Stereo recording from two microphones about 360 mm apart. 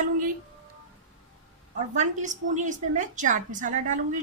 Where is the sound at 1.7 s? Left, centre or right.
Centre.